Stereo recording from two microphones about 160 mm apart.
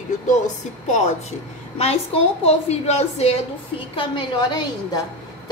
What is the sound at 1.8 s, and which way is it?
A woman's voice, 40° left (ahead or behind).